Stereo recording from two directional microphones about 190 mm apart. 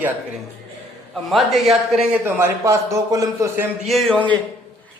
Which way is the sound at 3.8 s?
Centre (ahead or behind).